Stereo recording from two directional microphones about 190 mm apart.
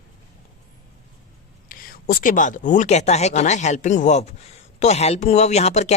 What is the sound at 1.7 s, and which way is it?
Speech, 50° left (ahead or behind).